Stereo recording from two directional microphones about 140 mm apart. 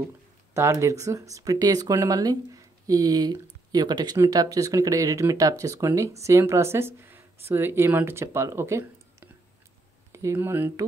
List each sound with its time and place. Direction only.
0.6 s speech: 20° right (ahead or behind)